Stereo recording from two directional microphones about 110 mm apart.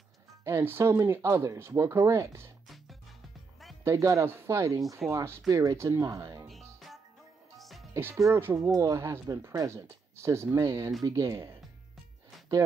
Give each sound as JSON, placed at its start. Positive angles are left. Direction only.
{"t": 0.4, "sound": "speech", "side_deg": -20}
{"t": 3.8, "sound": "speech", "side_deg": -30}
{"t": 6.4, "sound": "music", "side_deg": 0}
{"t": 7.9, "sound": "speech", "side_deg": -25}